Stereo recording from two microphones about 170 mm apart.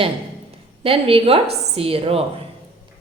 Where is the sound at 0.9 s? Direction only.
35° right (ahead or behind).